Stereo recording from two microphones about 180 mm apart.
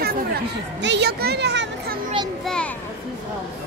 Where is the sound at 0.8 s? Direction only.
70° right (ahead or behind).